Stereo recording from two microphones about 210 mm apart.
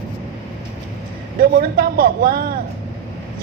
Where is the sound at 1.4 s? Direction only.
45° right (ahead or behind).